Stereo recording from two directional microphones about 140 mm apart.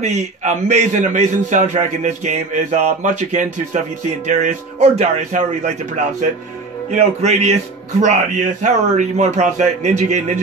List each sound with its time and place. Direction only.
0.0 s a man's voice: 55° right (ahead or behind)
6.9 s music: 55° right (ahead or behind)
8.0 s a man's voice: 60° right (ahead or behind)